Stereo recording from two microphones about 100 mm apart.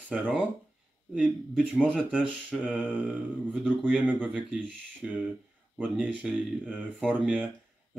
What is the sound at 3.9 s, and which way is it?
Speech, 15° right (ahead or behind).